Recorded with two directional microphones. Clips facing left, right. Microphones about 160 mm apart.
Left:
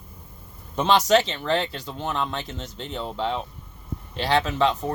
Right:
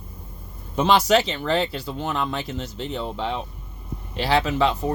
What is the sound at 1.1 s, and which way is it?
Speech, 10° right (ahead or behind).